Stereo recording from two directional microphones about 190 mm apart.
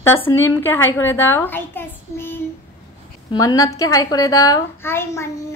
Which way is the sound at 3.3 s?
20° left (ahead or behind).